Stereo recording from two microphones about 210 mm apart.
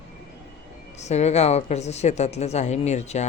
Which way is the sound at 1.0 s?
30° left (ahead or behind).